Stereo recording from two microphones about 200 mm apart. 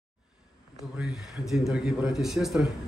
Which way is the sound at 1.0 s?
Centre (ahead or behind).